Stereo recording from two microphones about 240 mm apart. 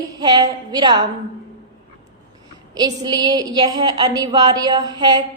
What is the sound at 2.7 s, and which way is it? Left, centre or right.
A woman's voice, centre.